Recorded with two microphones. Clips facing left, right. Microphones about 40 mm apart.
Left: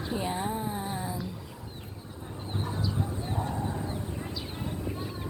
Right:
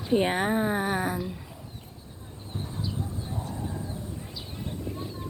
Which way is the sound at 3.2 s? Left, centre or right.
Left.